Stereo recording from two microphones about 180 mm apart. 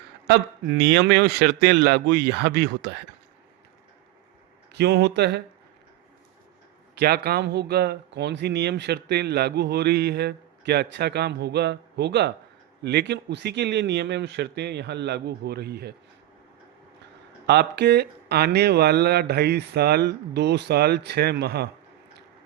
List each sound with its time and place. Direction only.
0.3 s speech: 65° right (ahead or behind)
4.7 s speech: 65° right (ahead or behind)
7.0 s speech: 60° right (ahead or behind)
17.4 s speech: 70° right (ahead or behind)